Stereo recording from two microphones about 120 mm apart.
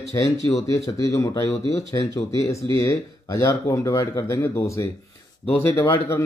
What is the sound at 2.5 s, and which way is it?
Mantra, 25° left (ahead or behind).